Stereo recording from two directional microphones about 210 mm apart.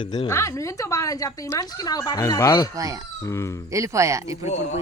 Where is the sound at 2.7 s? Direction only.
15° right (ahead or behind).